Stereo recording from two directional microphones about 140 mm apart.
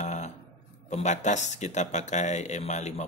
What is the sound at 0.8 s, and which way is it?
Speech, 55° left (ahead or behind).